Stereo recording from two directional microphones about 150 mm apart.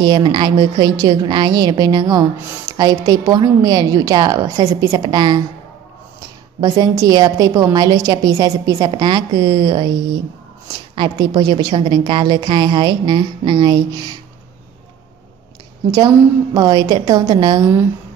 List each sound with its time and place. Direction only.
0.0 s a woman's voice: 30° right (ahead or behind)
6.6 s a woman's voice: 25° right (ahead or behind)
11.0 s a woman's voice: 25° right (ahead or behind)
16.5 s a woman's voice: 25° right (ahead or behind)